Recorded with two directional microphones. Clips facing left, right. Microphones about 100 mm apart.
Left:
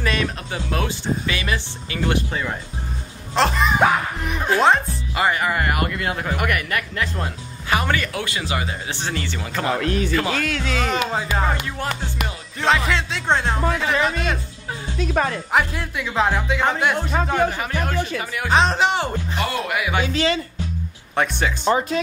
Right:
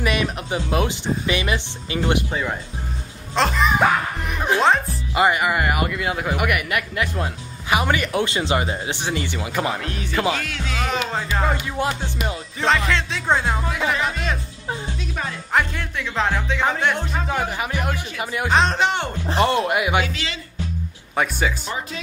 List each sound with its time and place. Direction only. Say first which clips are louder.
0.0 s speech: right 1 dB; 15° right (ahead or behind)
3.3 s music: left 1 dB; centre (ahead or behind)
5.1 s speech: right 2 dB; 15° right (ahead or behind)
10.4 s speech: left 5 dB; 70° left (ahead or behind)
10.9 s speech: left 2 dB; 5° left (ahead or behind)
11.8 s speech: right 6 dB; 20° right (ahead or behind)
12.5 s speech: left 1 dB; centre (ahead or behind)
15.0 s a woman's voice: left 8 dB; 60° left (ahead or behind)
15.5 s speech: right 1 dB; 5° left (ahead or behind)
17.3 s speech: left 2 dB; 10° right (ahead or behind)
18.5 s speech: left 2 dB; centre (ahead or behind)
19.2 s speech: right 6 dB; 30° right (ahead or behind)
21.1 s speech: even; 5° right (ahead or behind)
21.6 s speech: left 10 dB; 50° left (ahead or behind)